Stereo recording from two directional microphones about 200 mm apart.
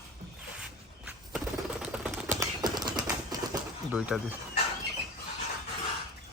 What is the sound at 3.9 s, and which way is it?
Speech, 5° right (ahead or behind).